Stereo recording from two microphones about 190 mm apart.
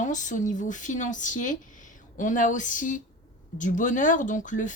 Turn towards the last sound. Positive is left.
turn(degrees=40)  # may be behind; listen again after turning